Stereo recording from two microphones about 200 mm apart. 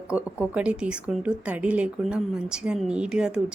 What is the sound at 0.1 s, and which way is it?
Speech, 5° right (ahead or behind).